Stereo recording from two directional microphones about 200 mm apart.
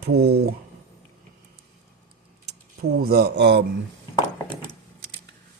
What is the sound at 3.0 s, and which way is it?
Speech, 50° right (ahead or behind).